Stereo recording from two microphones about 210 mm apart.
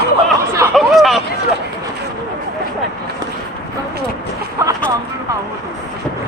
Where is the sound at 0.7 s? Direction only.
Centre (ahead or behind).